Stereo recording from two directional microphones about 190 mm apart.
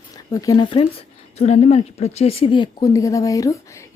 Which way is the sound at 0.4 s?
20° left (ahead or behind).